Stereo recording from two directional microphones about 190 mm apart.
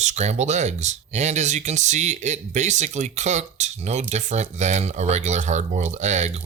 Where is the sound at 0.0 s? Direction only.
35° right (ahead or behind).